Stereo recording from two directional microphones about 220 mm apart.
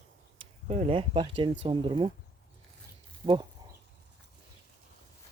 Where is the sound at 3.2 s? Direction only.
20° right (ahead or behind).